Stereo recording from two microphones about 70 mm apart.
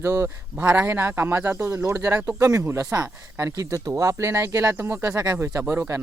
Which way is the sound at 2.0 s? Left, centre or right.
Right.